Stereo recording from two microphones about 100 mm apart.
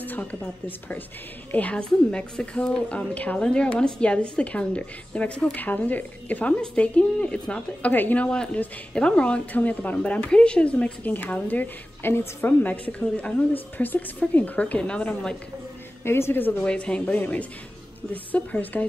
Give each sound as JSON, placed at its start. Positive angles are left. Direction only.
{"t": 0.0, "sound": "a woman's voice", "side_deg": 15}
{"t": 16.0, "sound": "speech", "side_deg": 25}
{"t": 16.6, "sound": "a woman's voice", "side_deg": 10}